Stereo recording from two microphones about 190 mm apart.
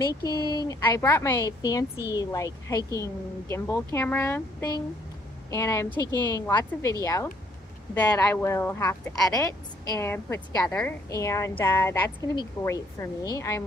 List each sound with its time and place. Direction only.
0.2 s speech: 20° left (ahead or behind)